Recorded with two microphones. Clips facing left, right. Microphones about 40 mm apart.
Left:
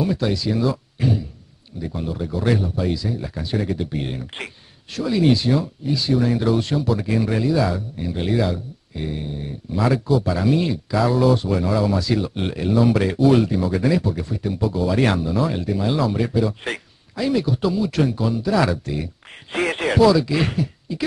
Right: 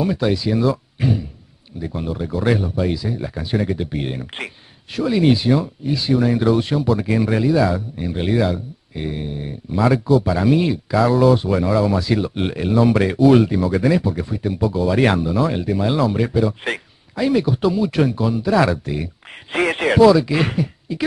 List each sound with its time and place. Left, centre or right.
0.0 s speech: centre